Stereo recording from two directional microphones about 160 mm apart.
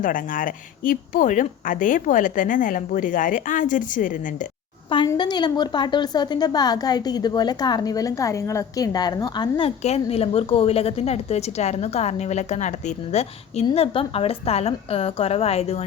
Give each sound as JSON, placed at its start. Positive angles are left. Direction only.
{"t": 0.0, "sound": "a woman's voice", "side_deg": 60}
{"t": 5.0, "sound": "a woman's voice", "side_deg": 30}